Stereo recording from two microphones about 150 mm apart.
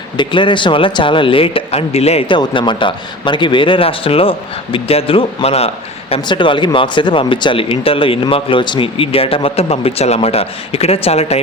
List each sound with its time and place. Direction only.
0.2 s speech: 30° left (ahead or behind)